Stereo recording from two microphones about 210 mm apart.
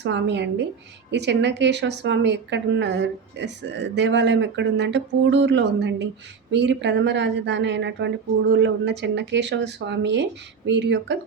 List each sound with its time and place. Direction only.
0.0 s speech: 55° right (ahead or behind)